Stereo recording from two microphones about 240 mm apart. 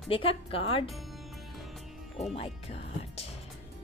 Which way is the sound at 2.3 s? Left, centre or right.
Left.